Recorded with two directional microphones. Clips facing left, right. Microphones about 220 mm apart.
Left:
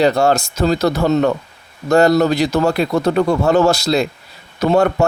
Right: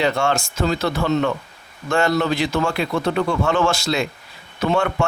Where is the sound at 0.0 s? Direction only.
40° left (ahead or behind).